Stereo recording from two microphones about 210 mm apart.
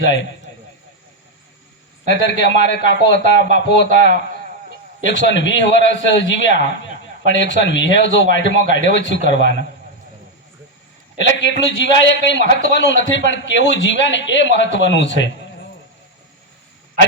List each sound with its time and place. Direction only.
2.0 s a man's voice: 55° left (ahead or behind)
5.0 s a man's voice: 60° left (ahead or behind)
11.2 s a man's voice: 60° left (ahead or behind)